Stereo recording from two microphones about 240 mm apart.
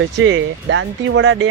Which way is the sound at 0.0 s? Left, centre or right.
Right.